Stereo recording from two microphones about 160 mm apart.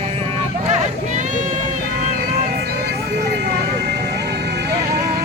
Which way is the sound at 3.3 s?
90° right.